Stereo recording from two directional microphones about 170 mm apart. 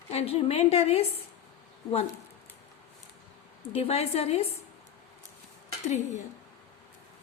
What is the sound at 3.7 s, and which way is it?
Speech, 35° left (ahead or behind).